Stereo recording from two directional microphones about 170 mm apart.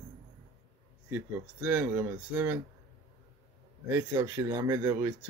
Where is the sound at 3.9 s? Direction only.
15° right (ahead or behind).